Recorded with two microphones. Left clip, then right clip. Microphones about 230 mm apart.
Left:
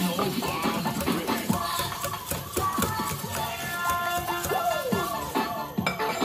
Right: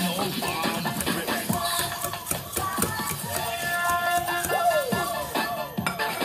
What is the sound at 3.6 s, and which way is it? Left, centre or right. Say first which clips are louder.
Music: right 4 dB; right.